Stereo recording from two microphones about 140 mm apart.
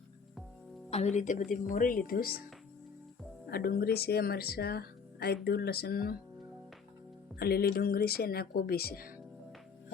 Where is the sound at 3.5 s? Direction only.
90° left.